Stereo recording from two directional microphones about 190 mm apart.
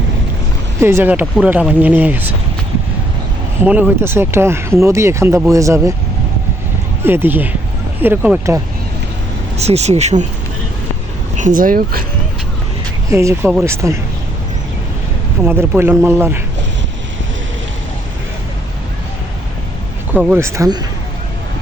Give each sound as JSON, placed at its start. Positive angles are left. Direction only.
{"t": 0.8, "sound": "speech", "side_deg": -15}
{"t": 3.6, "sound": "speech", "side_deg": -10}
{"t": 7.0, "sound": "speech", "side_deg": -10}
{"t": 9.6, "sound": "speech", "side_deg": -35}
{"t": 11.3, "sound": "speech", "side_deg": -45}
{"t": 13.1, "sound": "speech", "side_deg": -15}
{"t": 15.4, "sound": "speech", "side_deg": -10}
{"t": 20.1, "sound": "speech", "side_deg": -10}